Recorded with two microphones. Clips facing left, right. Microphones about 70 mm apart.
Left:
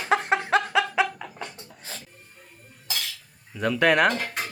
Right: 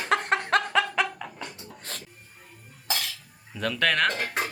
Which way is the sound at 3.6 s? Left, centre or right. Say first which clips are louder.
Left 5 dB; centre.